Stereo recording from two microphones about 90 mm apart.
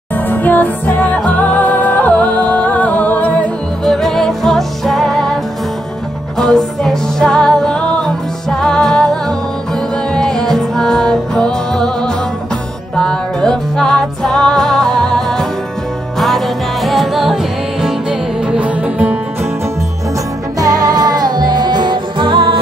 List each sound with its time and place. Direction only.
0.3 s music: 20° left (ahead or behind)
3.8 s music: 5° left (ahead or behind)
18.5 s music: 15° right (ahead or behind)
20.5 s music: 45° right (ahead or behind); by 22.6 s 75° right (ahead or behind)